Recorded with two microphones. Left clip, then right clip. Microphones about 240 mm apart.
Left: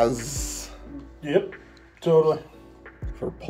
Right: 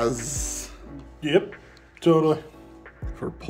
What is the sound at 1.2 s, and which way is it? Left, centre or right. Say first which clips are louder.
Speech: right 2 dB; right.